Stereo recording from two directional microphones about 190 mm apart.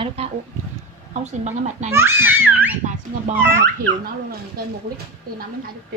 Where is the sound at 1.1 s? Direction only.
40° right (ahead or behind).